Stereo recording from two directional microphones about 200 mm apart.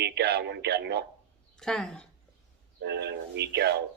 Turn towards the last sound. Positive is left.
turn(degrees=-55)  # may be behind; listen again after turning